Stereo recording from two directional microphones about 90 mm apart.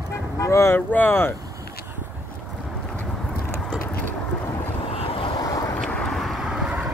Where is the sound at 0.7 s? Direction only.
20° left (ahead or behind).